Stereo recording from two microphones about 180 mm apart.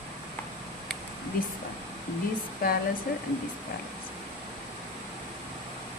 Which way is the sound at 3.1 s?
55° left (ahead or behind).